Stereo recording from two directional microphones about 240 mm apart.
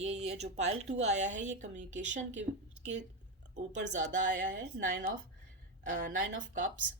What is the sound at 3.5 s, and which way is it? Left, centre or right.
A woman's voice, right.